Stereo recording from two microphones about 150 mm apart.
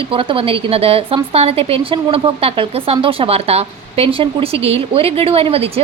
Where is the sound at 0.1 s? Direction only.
35° right (ahead or behind).